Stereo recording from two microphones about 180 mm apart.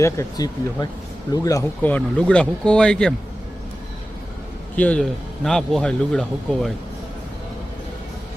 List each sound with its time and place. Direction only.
0.0 s a man's voice: 20° left (ahead or behind)
4.8 s a man's voice: 5° left (ahead or behind)